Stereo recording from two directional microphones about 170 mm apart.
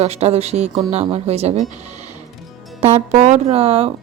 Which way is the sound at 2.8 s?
40° right (ahead or behind).